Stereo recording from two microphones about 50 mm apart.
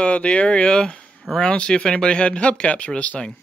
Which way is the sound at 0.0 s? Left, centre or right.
Left.